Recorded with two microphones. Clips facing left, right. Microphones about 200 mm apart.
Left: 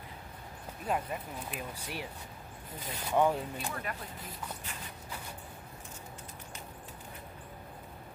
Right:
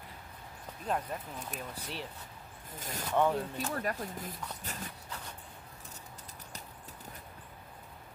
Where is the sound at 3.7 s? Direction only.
40° right (ahead or behind).